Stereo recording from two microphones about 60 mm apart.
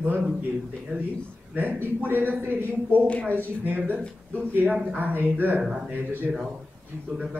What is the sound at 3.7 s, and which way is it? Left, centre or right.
Speech, right.